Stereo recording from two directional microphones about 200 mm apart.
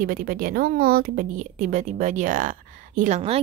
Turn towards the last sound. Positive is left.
turn(degrees=-30)  # may be behind; listen again after turning